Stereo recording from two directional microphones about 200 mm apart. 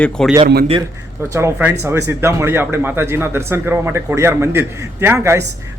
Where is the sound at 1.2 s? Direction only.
10° right (ahead or behind).